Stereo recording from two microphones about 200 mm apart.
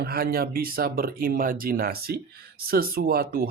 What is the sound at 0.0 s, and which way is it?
Speech, 50° right (ahead or behind).